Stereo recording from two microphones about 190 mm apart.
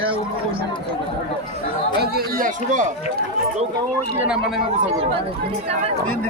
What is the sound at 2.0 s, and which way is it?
Speech, 55° right (ahead or behind).